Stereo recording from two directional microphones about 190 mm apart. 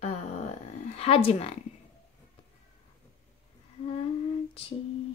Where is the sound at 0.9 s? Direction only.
30° left (ahead or behind).